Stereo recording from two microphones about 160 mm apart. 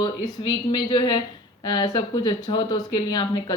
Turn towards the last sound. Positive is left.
turn(degrees=30)  # may be behind; listen again after turning